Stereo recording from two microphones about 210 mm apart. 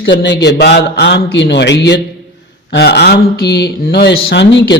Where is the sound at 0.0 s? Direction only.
60° left (ahead or behind).